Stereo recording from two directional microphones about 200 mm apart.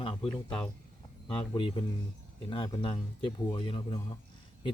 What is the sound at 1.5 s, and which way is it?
A man's voice, 25° left (ahead or behind).